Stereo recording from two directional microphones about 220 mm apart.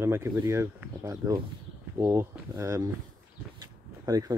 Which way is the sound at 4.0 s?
15° right (ahead or behind).